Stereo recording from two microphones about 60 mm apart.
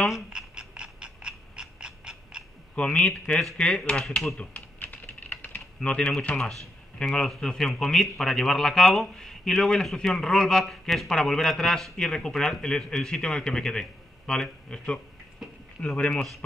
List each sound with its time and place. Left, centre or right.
0.3 s frog: centre
2.7 s speech: centre
3.1 s a man's voice: centre
4.7 s typing: left
5.9 s a man's voice: centre
6.3 s a man's voice: centre
16.1 s speech: centre